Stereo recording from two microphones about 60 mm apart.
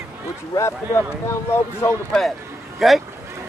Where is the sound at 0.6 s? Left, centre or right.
Left.